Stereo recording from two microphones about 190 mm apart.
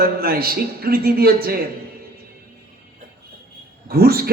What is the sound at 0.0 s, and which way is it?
A man's voice, 50° right (ahead or behind).